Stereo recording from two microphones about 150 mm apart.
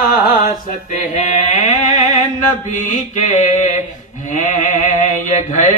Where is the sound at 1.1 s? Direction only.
50° left (ahead or behind).